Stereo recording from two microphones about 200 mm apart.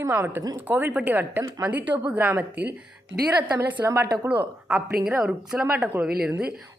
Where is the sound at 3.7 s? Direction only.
10° right (ahead or behind).